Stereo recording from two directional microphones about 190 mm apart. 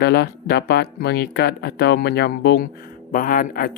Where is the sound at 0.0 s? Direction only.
60° left (ahead or behind).